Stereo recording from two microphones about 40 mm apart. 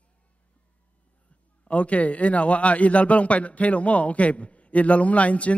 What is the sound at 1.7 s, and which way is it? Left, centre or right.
A man's voice, left.